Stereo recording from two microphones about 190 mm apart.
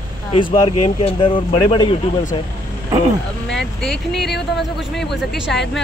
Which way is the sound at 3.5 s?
Centre (ahead or behind).